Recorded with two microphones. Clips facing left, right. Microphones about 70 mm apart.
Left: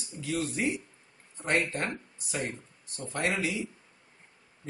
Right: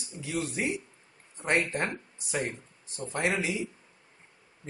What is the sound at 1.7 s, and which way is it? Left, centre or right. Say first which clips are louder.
Speech: right 2 dB; centre.